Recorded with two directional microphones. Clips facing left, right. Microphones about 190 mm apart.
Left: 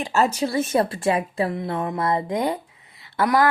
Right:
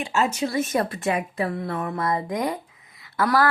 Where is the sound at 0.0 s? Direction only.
35° left (ahead or behind).